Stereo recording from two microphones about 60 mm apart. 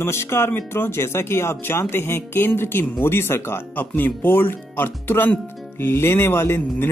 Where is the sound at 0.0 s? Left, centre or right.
Left.